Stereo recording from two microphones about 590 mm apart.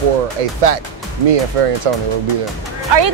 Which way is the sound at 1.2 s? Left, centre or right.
Right.